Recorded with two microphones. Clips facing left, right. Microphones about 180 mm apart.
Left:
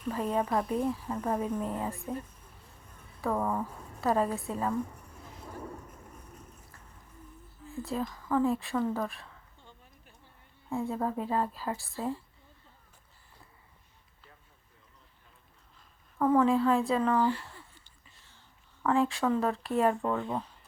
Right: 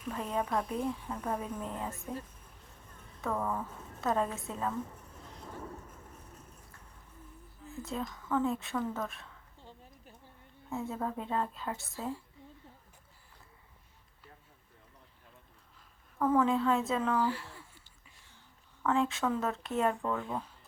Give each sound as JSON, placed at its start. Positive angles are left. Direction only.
{"t": 0.0, "sound": "a woman's voice", "side_deg": 0}
{"t": 3.2, "sound": "speech", "side_deg": 15}
{"t": 4.0, "sound": "a woman's voice", "side_deg": 5}
{"t": 7.8, "sound": "a woman's voice", "side_deg": 0}
{"t": 9.6, "sound": "a sound", "side_deg": -35}
{"t": 10.7, "sound": "a woman's voice", "side_deg": 0}
{"t": 16.1, "sound": "a woman's voice", "side_deg": 10}
{"t": 16.4, "sound": "a sound", "side_deg": 0}
{"t": 18.9, "sound": "a woman's voice", "side_deg": 0}